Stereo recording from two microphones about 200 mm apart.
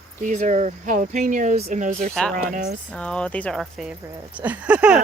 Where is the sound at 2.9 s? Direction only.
5° left (ahead or behind).